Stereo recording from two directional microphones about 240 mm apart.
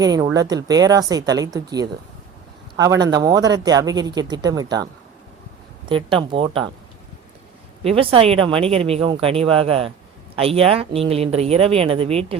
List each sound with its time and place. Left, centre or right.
0.0 s speech: centre
5.9 s speech: right
7.9 s speech: right